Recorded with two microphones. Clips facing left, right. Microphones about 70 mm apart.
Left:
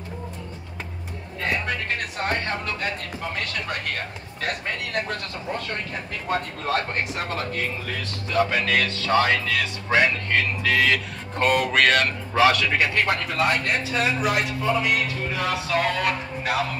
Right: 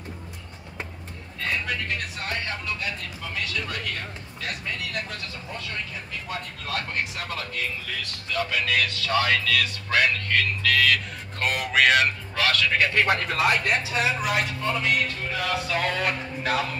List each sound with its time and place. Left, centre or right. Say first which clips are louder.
2.1 s speech: left 5 dB; left
6.2 s speech: left 11 dB; left
11.4 s speech: left 2 dB; centre
12.4 s a man's voice: left 5 dB; centre
12.9 s speech: right 1 dB; centre